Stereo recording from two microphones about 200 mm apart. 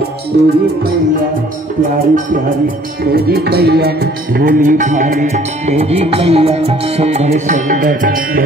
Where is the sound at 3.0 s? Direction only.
50° right (ahead or behind).